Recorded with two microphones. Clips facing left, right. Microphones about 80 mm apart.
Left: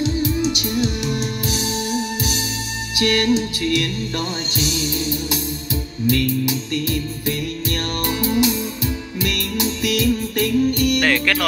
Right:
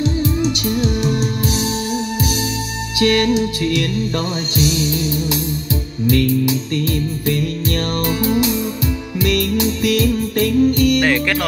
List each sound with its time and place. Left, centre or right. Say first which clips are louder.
3.0 s music: right 3 dB; right
4.6 s music: right 7 dB; left
6.0 s music: right 4 dB; right
8.1 s music: right 1 dB; right